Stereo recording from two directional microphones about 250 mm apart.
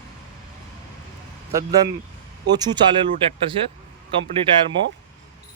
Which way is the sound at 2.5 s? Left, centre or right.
Centre.